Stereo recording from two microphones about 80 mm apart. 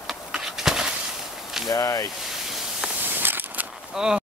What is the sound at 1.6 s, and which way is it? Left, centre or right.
Speech, left.